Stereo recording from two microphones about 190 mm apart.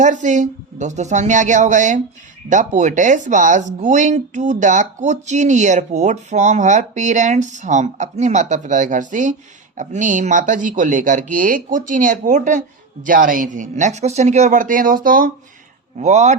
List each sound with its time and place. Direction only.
0.0 s speech: 40° right (ahead or behind)
16.0 s speech: 35° right (ahead or behind)